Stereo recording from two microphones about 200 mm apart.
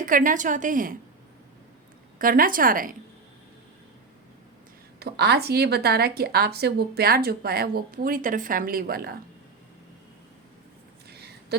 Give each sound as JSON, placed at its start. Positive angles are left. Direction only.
{"t": 0.0, "sound": "a woman's voice", "side_deg": -40}
{"t": 2.1, "sound": "speech", "side_deg": -45}
{"t": 4.9, "sound": "speech", "side_deg": -55}
{"t": 11.1, "sound": "a sound", "side_deg": -55}